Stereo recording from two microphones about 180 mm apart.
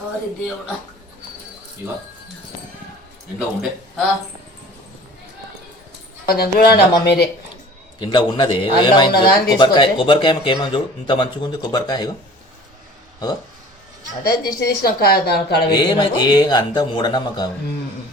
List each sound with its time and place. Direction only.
3.3 s a man's voice: 5° right (ahead or behind)
6.2 s a woman's voice: 60° left (ahead or behind)
7.9 s speech: 25° left (ahead or behind)
14.3 s a woman's voice: 55° left (ahead or behind)
15.7 s speech: 25° left (ahead or behind)